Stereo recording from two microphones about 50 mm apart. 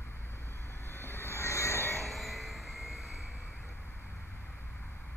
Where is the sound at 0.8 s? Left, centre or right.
Left.